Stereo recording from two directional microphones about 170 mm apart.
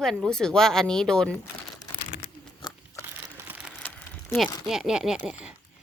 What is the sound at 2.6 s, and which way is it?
Crunch, 25° left (ahead or behind).